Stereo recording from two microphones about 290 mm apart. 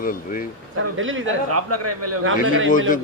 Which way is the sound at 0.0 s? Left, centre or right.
Left.